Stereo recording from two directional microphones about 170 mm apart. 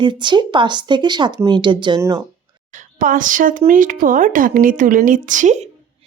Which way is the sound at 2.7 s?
50° right (ahead or behind).